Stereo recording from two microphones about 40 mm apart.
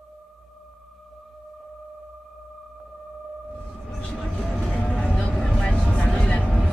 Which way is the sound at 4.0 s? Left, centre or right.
Left.